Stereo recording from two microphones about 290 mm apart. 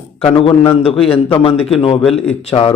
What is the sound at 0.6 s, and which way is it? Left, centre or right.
Speech, centre.